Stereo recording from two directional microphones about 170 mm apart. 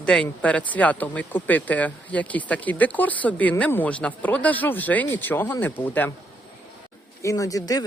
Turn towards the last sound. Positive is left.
turn(degrees=20)  # may be behind; listen again after turning